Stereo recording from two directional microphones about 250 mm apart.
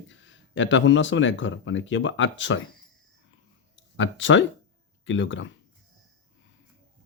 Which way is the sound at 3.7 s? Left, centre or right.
Left.